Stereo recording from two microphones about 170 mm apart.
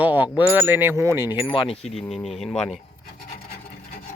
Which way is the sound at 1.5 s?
35° left (ahead or behind).